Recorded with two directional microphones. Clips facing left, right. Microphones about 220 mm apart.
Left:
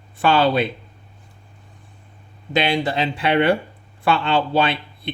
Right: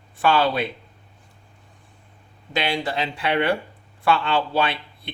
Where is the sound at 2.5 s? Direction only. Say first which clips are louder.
Left 5 dB; 20° left (ahead or behind).